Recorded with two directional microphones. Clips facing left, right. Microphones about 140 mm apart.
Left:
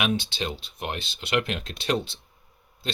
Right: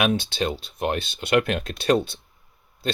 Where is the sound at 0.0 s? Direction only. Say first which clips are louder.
Right 4 dB; 50° right (ahead or behind).